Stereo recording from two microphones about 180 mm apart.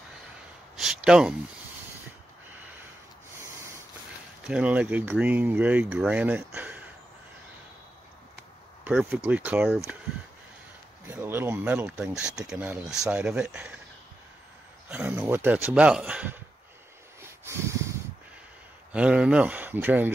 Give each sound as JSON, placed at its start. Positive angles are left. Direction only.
{"t": 0.7, "sound": "a sound", "side_deg": -5}
{"t": 3.3, "sound": "snort", "side_deg": -15}
{"t": 4.5, "sound": "speech", "side_deg": -5}
{"t": 8.8, "sound": "speech", "side_deg": -10}
{"t": 11.1, "sound": "speech", "side_deg": -10}
{"t": 14.9, "sound": "speech", "side_deg": -10}
{"t": 17.2, "sound": "a sound", "side_deg": -15}
{"t": 18.9, "sound": "speech", "side_deg": -5}